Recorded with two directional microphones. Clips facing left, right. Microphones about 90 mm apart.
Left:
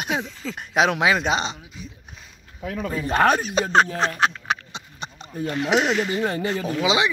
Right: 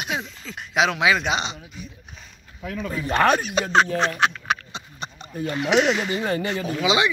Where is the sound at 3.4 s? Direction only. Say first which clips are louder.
Left 1 dB; 35° left (ahead or behind).